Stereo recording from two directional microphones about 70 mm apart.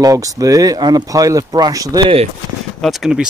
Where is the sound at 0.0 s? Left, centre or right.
Right.